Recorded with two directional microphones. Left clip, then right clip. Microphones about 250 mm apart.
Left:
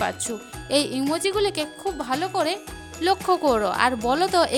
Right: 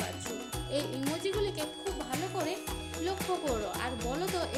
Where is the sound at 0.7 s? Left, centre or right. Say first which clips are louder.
Left 12 dB; left.